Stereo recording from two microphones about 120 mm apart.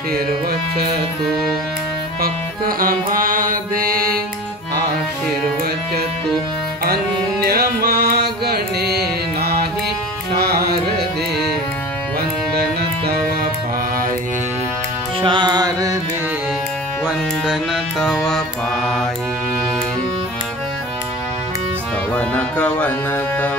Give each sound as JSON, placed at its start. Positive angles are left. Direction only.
{"t": 15.2, "sound": "music", "side_deg": -40}
{"t": 17.5, "sound": "music", "side_deg": 0}
{"t": 22.1, "sound": "music", "side_deg": 10}